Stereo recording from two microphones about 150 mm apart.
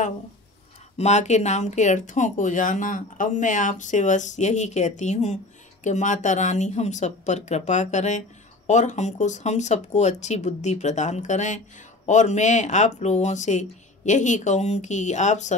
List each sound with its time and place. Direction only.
0.9 s speech: 50° left (ahead or behind)